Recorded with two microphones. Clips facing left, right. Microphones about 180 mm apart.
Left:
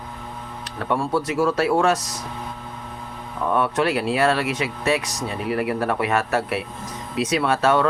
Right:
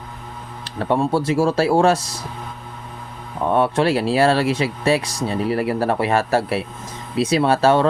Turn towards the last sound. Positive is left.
turn(degrees=-30)  # may be behind; listen again after turning